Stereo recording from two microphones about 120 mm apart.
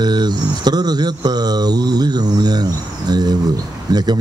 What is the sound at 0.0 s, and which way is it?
Speech, 35° right (ahead or behind).